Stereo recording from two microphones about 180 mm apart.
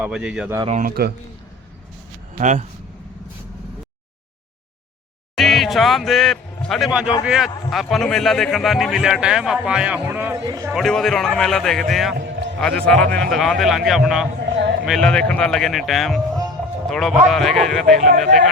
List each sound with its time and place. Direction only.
0.0 s a man's voice: 5° right (ahead or behind)
0.8 s speech: 55° right (ahead or behind)
2.4 s speech: 40° right (ahead or behind)
5.3 s a man's voice: centre (ahead or behind)
10.4 s speech: 20° right (ahead or behind)
10.7 s a man's voice: centre (ahead or behind)